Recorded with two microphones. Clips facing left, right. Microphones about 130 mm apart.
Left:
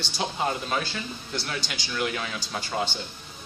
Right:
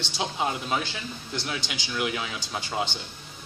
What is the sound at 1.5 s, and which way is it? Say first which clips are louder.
Speech: even; 15° right (ahead or behind).